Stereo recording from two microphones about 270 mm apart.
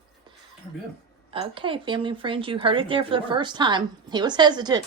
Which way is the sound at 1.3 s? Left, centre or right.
Centre.